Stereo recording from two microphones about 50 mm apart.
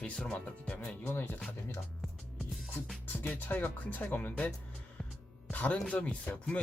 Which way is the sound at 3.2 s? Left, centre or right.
Left.